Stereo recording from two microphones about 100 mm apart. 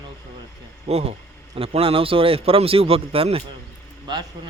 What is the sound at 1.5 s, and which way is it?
Speech, 70° right (ahead or behind).